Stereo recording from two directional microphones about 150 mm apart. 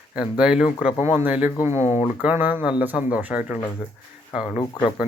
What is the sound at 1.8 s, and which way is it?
Speech, 50° left (ahead or behind).